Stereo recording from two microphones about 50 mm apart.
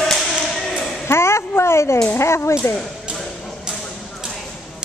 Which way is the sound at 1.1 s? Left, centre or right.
Left.